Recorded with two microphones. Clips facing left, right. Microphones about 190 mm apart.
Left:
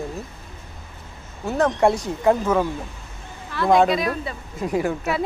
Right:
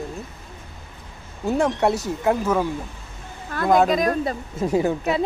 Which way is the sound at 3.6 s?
Centre (ahead or behind).